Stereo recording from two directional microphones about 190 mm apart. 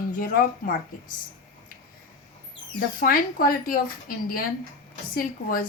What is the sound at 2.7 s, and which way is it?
A woman's voice, 50° left (ahead or behind).